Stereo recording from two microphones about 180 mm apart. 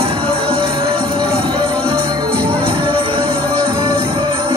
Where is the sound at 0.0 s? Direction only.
30° right (ahead or behind).